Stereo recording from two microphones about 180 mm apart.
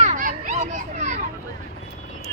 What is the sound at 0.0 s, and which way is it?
Children playing, 45° right (ahead or behind).